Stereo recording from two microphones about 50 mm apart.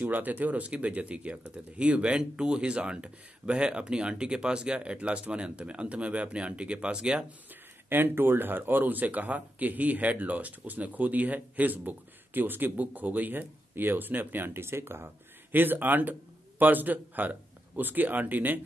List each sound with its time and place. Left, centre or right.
0.0 s speech: right
7.9 s speech: right
15.5 s a man's voice: right